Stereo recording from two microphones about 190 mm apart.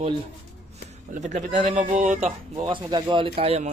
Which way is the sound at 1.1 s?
40° right (ahead or behind).